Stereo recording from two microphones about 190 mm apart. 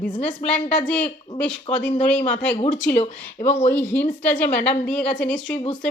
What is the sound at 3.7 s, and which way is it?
A woman's voice, 10° left (ahead or behind).